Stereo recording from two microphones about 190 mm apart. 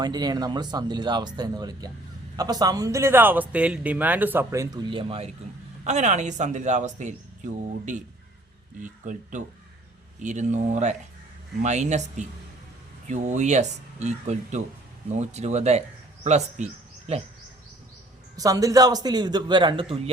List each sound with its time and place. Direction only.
0.0 s a man's voice: 20° right (ahead or behind); by 16.6 s 35° right (ahead or behind)
18.3 s speech: 20° right (ahead or behind)